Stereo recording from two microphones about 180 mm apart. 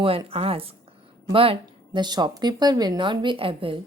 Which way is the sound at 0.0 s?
30° right (ahead or behind).